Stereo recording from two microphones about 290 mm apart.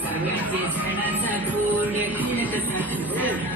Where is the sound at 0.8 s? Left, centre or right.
Centre.